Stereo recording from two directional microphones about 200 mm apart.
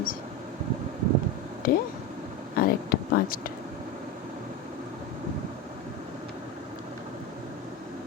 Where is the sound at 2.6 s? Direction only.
50° left (ahead or behind).